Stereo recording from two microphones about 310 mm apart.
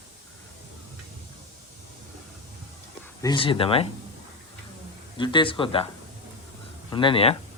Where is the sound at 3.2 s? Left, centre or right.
Centre.